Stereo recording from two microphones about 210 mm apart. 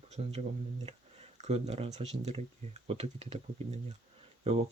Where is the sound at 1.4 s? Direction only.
30° right (ahead or behind).